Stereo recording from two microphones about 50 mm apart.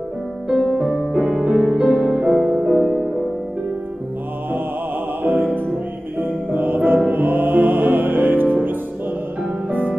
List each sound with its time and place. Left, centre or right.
0.5 s music: centre
6.1 s music: right
9.7 s music: right